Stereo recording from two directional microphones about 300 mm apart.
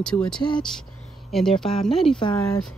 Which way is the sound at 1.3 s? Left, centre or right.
Centre.